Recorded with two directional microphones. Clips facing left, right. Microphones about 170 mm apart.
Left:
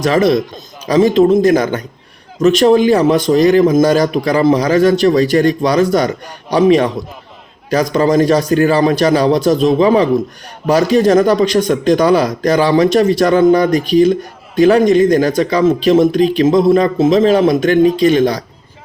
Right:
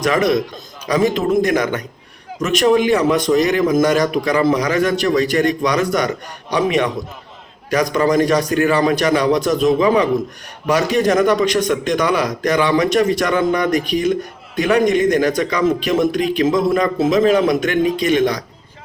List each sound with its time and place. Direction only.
0.0 s a man's voice: 30° left (ahead or behind)